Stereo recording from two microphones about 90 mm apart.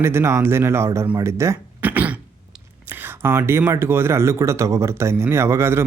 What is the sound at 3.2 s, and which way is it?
Speech, 25° right (ahead or behind).